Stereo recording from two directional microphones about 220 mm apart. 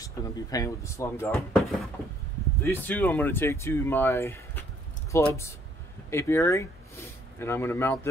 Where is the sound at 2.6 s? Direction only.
10° left (ahead or behind).